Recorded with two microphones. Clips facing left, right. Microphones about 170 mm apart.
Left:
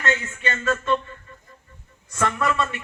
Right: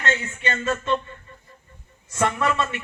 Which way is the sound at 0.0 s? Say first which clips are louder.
Even; 25° right (ahead or behind).